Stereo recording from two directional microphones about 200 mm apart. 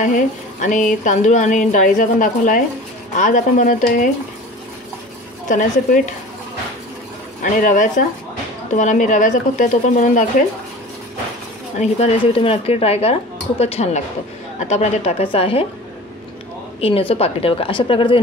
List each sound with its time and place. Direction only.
0.0 s speech: 40° left (ahead or behind)
5.5 s speech: 40° left (ahead or behind)
7.6 s speech: 40° left (ahead or behind)
11.8 s a woman's voice: 30° left (ahead or behind)
17.1 s a woman's voice: 30° left (ahead or behind)